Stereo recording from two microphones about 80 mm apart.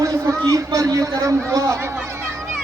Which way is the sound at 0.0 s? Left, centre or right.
Right.